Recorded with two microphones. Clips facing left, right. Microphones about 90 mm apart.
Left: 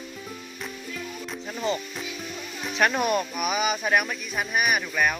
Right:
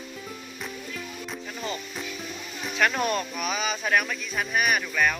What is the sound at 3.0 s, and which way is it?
Speech, 10° left (ahead or behind).